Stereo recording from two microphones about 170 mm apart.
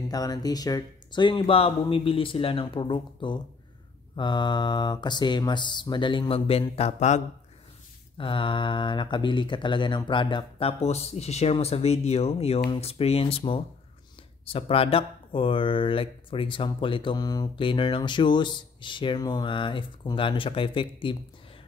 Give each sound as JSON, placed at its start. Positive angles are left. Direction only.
{"t": 0.1, "sound": "speech", "side_deg": 20}
{"t": 8.2, "sound": "speech", "side_deg": 30}